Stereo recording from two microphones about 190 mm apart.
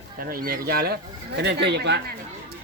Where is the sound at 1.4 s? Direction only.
60° right (ahead or behind).